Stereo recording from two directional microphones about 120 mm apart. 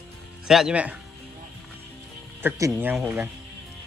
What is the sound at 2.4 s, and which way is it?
Speech, 20° right (ahead or behind).